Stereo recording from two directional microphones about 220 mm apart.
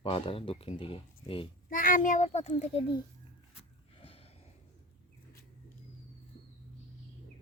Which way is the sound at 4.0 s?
25° left (ahead or behind).